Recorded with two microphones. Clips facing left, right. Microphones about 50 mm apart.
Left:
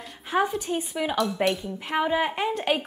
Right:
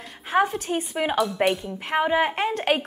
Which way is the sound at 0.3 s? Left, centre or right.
Right.